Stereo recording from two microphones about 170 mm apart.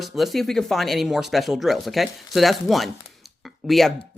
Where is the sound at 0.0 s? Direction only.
Centre (ahead or behind).